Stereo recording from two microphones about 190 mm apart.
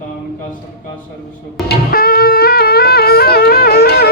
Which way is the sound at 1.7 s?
50° left (ahead or behind).